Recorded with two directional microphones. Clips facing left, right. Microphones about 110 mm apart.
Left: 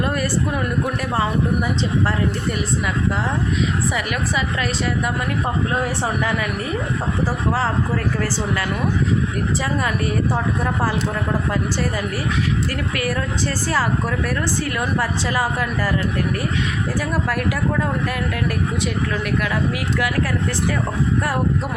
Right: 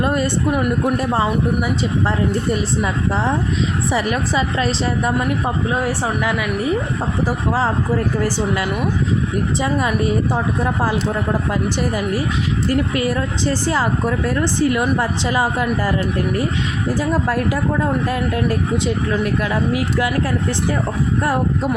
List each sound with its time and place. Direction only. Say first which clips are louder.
0.0 s speech: right 3 dB; 25° right (ahead or behind)
3.9 s speech: right 4 dB; 30° right (ahead or behind)
7.3 s speech: right 3 dB; 20° right (ahead or behind)
11.8 s speech: right 3 dB; 20° right (ahead or behind)
17.0 s speech: right 4 dB; 25° right (ahead or behind)